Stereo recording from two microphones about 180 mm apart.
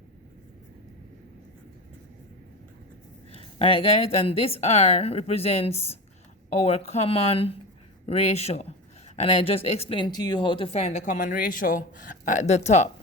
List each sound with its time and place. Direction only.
3.3 s speech: 30° left (ahead or behind)